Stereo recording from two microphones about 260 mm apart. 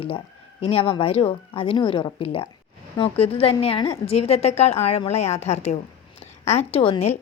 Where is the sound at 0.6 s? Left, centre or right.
Left.